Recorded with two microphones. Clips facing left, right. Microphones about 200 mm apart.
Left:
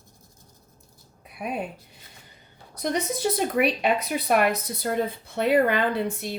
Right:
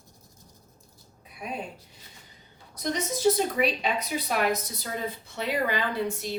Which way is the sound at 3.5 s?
60° left (ahead or behind).